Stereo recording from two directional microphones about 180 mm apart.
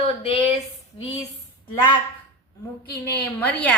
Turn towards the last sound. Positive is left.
turn(degrees=5)  # may be behind; listen again after turning